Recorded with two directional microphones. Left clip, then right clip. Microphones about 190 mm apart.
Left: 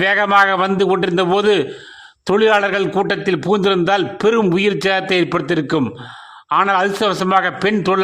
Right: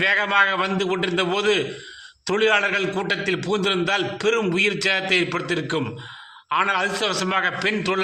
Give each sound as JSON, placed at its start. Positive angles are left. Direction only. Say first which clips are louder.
{"t": 0.0, "sound": "a man's voice", "louder": "left 5 dB", "side_deg": 50}